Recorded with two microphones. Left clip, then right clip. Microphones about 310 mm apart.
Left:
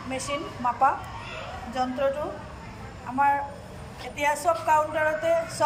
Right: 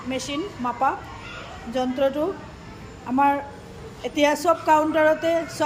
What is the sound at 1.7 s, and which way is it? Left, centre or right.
Speech, centre.